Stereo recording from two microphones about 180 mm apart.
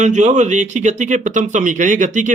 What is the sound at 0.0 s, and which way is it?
Speech, 40° right (ahead or behind).